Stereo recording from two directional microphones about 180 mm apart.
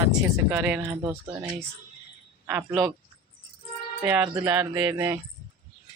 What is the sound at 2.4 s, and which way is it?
Speech, 10° right (ahead or behind).